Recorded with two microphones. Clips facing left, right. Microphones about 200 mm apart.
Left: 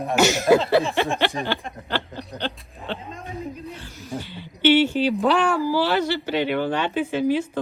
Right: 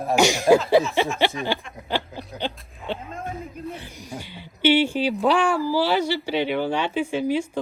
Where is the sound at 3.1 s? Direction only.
50° right (ahead or behind).